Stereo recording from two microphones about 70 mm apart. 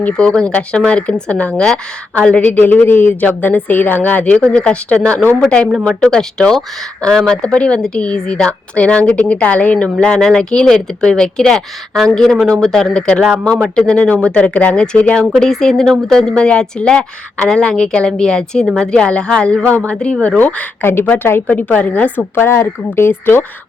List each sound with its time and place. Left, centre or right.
0.2 s speech: centre
2.5 s a woman's voice: left
15.4 s speech: centre
19.6 s a woman's voice: right
19.9 s a woman's voice: centre; by 23.5 s left